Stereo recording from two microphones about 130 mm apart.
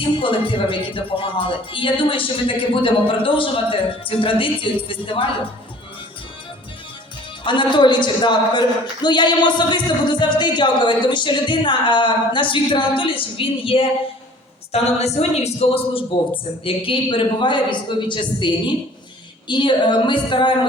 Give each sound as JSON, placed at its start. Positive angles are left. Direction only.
{"t": 0.2, "sound": "a woman's voice", "side_deg": 40}
{"t": 7.4, "sound": "a woman's voice", "side_deg": 40}
{"t": 14.7, "sound": "a woman's voice", "side_deg": 55}